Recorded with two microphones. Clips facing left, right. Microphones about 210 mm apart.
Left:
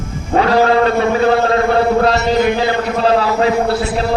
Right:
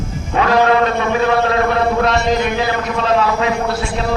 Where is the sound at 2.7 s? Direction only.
30° left (ahead or behind).